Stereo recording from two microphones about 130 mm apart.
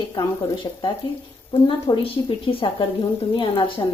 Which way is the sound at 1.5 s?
45° left (ahead or behind).